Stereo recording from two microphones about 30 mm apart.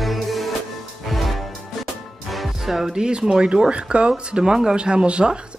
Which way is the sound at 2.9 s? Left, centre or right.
Right.